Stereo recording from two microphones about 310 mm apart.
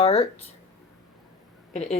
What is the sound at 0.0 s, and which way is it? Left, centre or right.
Speech, centre.